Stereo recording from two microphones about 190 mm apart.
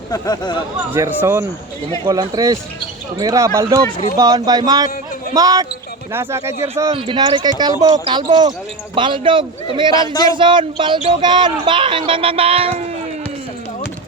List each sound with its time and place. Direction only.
0.1 s speech: 20° left (ahead or behind)
0.9 s speech: 10° right (ahead or behind)
6.9 s speech: 25° right (ahead or behind)
9.9 s speech: 20° left (ahead or behind)
10.2 s speech: 25° right (ahead or behind)